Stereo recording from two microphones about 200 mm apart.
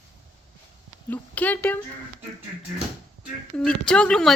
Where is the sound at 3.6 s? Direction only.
5° left (ahead or behind).